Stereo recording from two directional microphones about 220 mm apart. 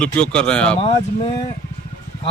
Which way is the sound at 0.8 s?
25° left (ahead or behind).